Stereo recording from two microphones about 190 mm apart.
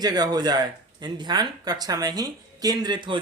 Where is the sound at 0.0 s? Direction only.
20° right (ahead or behind).